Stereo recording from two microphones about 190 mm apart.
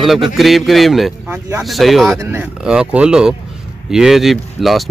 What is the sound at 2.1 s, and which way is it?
Speech, 10° right (ahead or behind).